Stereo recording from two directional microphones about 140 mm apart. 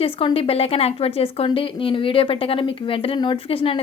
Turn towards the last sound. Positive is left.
turn(degrees=40)  # may be behind; listen again after turning